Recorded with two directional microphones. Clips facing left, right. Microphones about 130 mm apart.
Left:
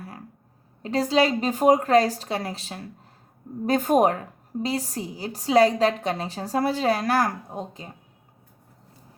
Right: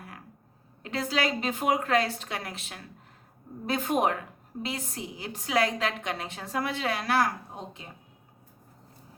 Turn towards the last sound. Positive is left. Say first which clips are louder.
# left 6 dB
turn(degrees=40)  # may be behind; listen again after turning